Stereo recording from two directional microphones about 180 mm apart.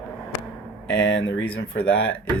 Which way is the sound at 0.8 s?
85° left.